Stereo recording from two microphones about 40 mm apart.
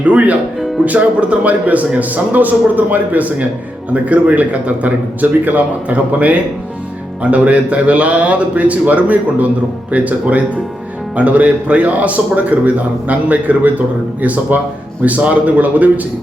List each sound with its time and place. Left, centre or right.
0.0 s a man's voice: right